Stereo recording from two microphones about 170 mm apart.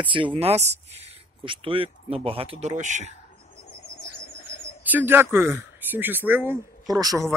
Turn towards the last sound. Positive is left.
turn(degrees=-20)  # may be behind; listen again after turning